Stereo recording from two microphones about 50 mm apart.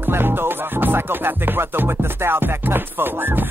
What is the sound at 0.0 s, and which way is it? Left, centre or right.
Music, right.